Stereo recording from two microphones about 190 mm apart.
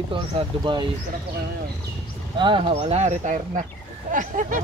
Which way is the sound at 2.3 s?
25° right (ahead or behind).